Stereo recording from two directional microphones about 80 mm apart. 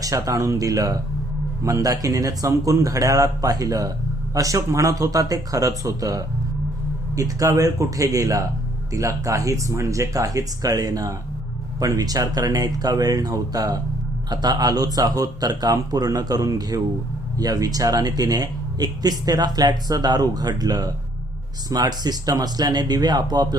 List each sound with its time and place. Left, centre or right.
0.0 s speech: right